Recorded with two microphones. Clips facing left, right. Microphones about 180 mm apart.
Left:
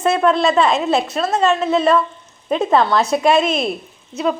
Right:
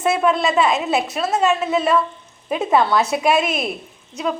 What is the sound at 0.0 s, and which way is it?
A woman's voice, 5° right (ahead or behind).